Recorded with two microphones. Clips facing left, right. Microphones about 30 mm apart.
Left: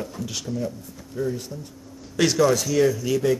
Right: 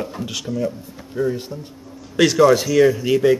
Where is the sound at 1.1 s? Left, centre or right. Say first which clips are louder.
Right 5 dB; right.